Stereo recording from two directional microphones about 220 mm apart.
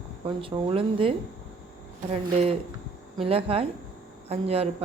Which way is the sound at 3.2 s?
25° right (ahead or behind).